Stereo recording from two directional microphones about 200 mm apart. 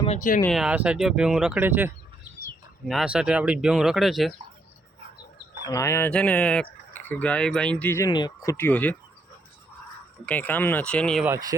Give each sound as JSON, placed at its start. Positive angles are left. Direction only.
{"t": 0.0, "sound": "speech", "side_deg": 35}
{"t": 0.4, "sound": "speech", "side_deg": 0}
{"t": 5.6, "sound": "speech", "side_deg": 15}
{"t": 10.2, "sound": "speech", "side_deg": 10}
{"t": 11.3, "sound": "speech", "side_deg": -20}